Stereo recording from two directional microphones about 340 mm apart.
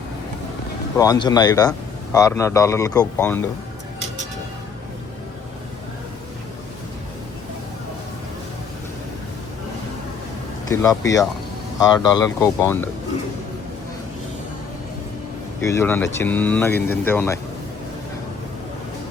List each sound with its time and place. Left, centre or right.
0.9 s a man's voice: centre
10.7 s a man's voice: centre
15.6 s a man's voice: centre